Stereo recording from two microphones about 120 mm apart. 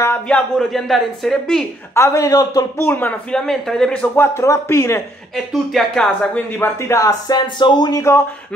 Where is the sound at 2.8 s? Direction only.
15° left (ahead or behind).